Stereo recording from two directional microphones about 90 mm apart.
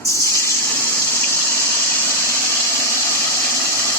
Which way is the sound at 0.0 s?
35° left (ahead or behind).